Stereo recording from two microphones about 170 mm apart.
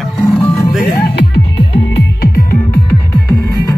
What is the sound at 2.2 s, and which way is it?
Music, 65° left (ahead or behind).